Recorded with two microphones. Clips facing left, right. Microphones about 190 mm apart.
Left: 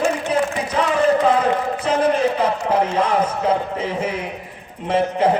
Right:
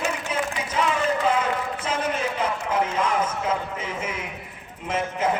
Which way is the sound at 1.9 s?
35° left (ahead or behind).